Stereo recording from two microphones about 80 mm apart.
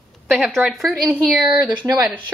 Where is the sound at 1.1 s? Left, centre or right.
Centre.